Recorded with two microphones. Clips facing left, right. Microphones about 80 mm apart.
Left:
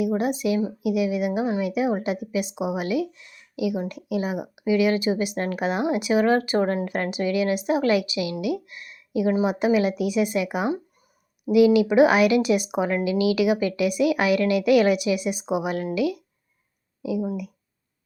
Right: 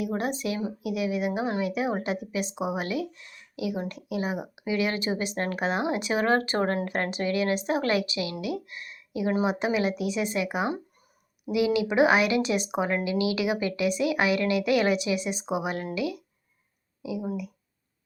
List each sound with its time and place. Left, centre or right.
0.2 s a woman's voice: right